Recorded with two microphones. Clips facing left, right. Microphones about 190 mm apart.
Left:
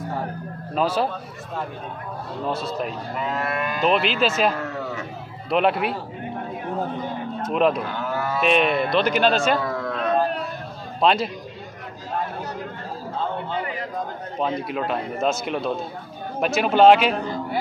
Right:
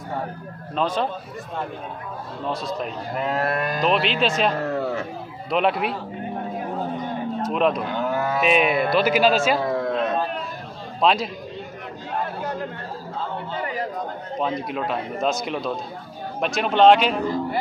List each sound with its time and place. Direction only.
0.7 s a man's voice: 5° left (ahead or behind)
2.4 s a man's voice: 5° left (ahead or behind)
3.2 s livestock: 40° right (ahead or behind)
3.8 s a man's voice: centre (ahead or behind)
4.6 s a sound: 35° right (ahead or behind)
5.5 s a man's voice: centre (ahead or behind)
7.5 s a man's voice: centre (ahead or behind)
7.9 s livestock: 20° right (ahead or behind)
8.4 s a man's voice: 5° right (ahead or behind)
9.6 s a sound: 25° right (ahead or behind)
11.0 s a man's voice: centre (ahead or behind)
14.4 s a man's voice: centre (ahead or behind)